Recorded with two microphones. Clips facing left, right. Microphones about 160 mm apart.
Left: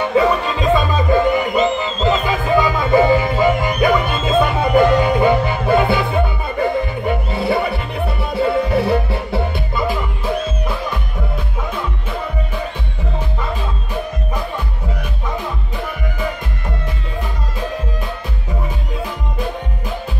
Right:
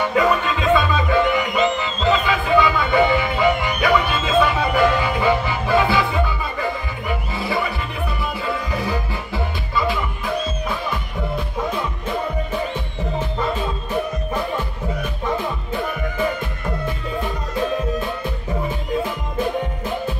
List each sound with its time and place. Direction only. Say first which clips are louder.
0.1 s music: left 5 dB; 30° left (ahead or behind)
0.6 s music: left 2 dB; 40° left (ahead or behind); by 9.8 s 65° left (ahead or behind)